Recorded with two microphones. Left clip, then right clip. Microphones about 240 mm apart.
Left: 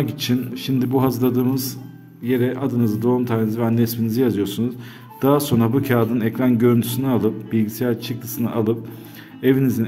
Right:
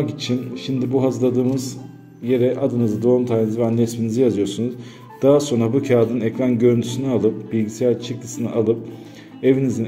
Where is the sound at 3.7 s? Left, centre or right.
Centre.